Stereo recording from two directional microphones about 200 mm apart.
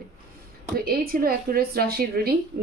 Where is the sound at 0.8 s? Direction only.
50° right (ahead or behind).